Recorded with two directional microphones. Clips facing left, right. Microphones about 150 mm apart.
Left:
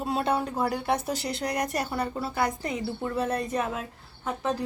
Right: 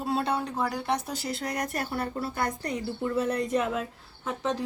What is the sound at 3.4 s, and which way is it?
Speech, 90° right.